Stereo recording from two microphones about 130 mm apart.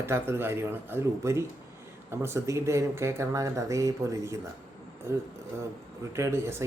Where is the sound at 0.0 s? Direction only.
20° right (ahead or behind).